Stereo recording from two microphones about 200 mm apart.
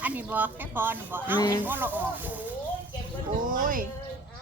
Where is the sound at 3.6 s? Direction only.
45° right (ahead or behind).